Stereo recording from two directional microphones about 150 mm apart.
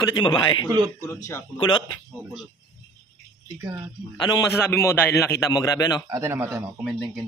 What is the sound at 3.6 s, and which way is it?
Speech, 20° right (ahead or behind).